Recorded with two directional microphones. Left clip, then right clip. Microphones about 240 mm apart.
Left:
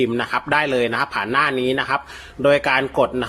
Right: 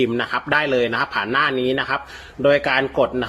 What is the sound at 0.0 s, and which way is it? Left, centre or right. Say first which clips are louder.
A man's voice: even; centre.